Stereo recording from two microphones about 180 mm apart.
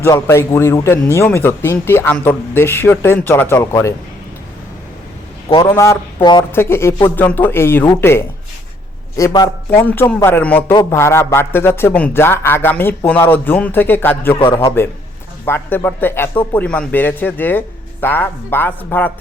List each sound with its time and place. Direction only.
0.0 s a man's voice: 15° left (ahead or behind)
5.6 s a man's voice: 15° left (ahead or behind)
14.3 s a man's voice: 30° left (ahead or behind)
15.4 s a man's voice: 10° left (ahead or behind)